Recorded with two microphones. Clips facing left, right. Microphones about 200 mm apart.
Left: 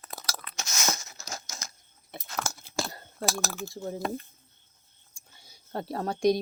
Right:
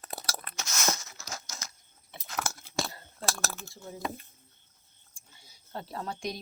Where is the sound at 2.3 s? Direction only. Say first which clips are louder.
Left 1 dB; centre (ahead or behind).